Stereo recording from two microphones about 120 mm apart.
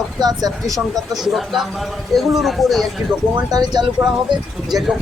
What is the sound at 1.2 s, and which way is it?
Speech, centre (ahead or behind).